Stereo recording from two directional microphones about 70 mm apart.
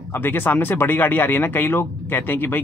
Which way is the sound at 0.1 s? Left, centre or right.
Left.